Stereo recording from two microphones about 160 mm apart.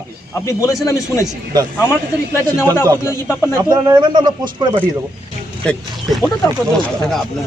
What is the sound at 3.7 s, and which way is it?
A man's voice, 25° right (ahead or behind).